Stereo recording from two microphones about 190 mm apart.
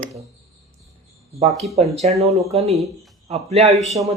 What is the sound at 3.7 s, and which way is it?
Speech, centre (ahead or behind).